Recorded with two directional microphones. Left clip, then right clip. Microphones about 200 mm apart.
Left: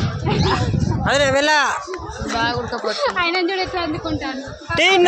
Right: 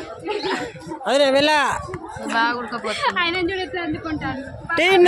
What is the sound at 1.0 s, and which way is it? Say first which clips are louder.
Speech: even; 35° right (ahead or behind).